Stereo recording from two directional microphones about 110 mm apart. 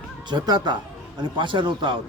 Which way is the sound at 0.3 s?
45° right (ahead or behind).